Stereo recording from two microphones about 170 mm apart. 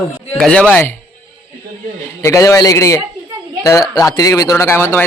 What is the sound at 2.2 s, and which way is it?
A man's voice, 20° left (ahead or behind).